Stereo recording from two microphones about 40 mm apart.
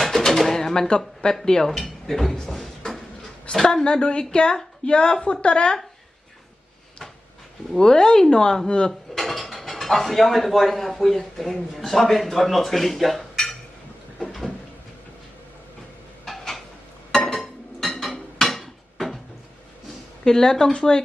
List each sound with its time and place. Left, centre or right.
0.0 s bird: centre
0.9 s a woman's voice: left
1.6 s speech: centre
3.8 s a woman's voice: left
7.8 s a woman's voice: centre
8.9 s dishes: centre
11.7 s speech: centre
16.2 s a sound: centre
20.2 s a woman's voice: centre